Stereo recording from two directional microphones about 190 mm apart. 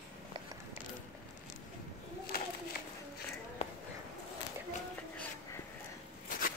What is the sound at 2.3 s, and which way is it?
Bird, 50° left (ahead or behind).